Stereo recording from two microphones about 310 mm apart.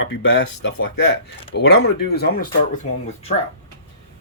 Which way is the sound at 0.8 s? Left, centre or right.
Left.